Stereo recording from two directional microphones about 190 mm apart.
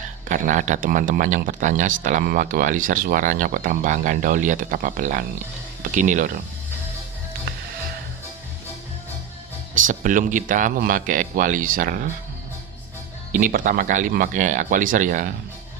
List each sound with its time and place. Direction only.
0.3 s a man's voice: 45° right (ahead or behind)
9.7 s a man's voice: 45° right (ahead or behind)
13.3 s a man's voice: 45° right (ahead or behind)